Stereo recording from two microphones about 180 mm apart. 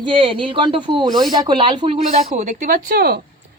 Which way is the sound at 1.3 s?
25° right (ahead or behind).